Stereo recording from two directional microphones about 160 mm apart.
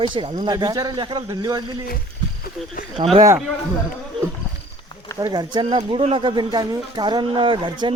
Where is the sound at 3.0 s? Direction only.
30° right (ahead or behind).